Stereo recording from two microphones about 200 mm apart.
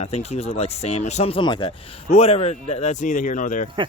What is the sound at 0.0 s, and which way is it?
Speech, 30° left (ahead or behind).